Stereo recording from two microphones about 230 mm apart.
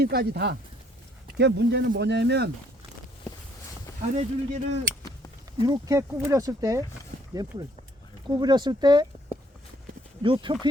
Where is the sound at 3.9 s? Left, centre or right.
Centre.